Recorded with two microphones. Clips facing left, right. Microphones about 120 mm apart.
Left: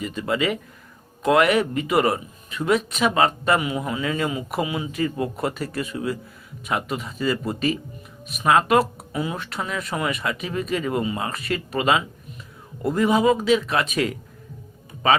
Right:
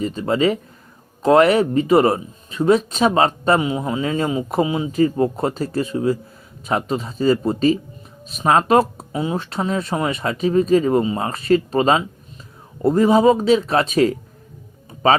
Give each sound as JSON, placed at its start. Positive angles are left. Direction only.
{"t": 0.0, "sound": "speech", "side_deg": -30}